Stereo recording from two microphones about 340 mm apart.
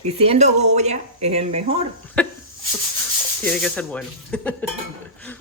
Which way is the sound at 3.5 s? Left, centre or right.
Centre.